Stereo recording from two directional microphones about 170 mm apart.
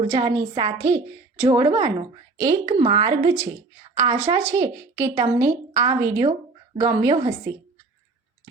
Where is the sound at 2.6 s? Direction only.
35° right (ahead or behind).